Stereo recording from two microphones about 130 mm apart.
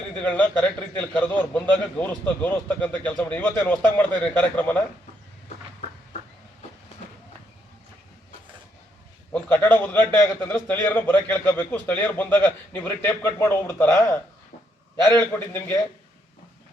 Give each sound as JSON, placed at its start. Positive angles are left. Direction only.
{"t": 0.2, "sound": "a man's voice", "side_deg": 10}
{"t": 9.5, "sound": "a man's voice", "side_deg": 15}